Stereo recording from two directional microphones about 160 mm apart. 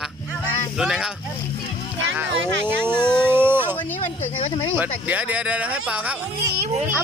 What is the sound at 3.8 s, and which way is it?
Speech, 10° left (ahead or behind).